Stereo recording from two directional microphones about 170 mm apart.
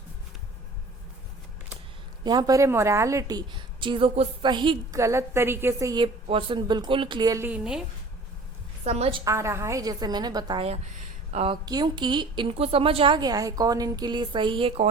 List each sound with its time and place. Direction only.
2.2 s a woman's voice: 25° right (ahead or behind)
4.9 s a woman's voice: 15° right (ahead or behind)
6.2 s a woman's voice: 30° right (ahead or behind); by 7.8 s 5° right (ahead or behind)
8.8 s a woman's voice: 40° right (ahead or behind)
9.2 s a woman's voice: 15° right (ahead or behind)
11.3 s a woman's voice: 40° right (ahead or behind)
11.6 s a woman's voice: 25° right (ahead or behind)